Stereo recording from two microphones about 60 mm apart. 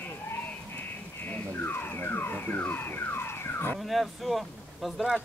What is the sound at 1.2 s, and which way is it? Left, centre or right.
Car alarm, left.